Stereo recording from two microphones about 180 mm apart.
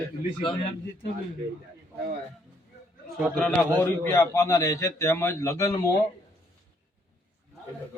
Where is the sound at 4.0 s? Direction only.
15° left (ahead or behind).